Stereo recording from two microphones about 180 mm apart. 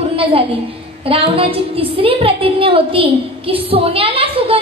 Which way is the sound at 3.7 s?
30° right (ahead or behind).